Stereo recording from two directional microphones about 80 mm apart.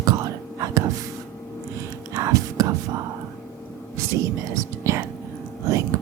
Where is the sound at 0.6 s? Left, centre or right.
Right.